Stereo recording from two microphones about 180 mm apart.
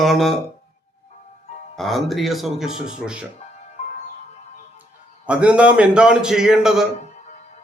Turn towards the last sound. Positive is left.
turn(degrees=0)  # may be behind; listen again after turning